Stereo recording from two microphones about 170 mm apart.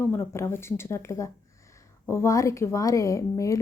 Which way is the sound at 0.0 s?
15° left (ahead or behind).